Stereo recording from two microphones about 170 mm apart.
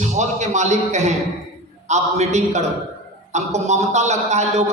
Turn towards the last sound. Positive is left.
turn(degrees=-40)  # may be behind; listen again after turning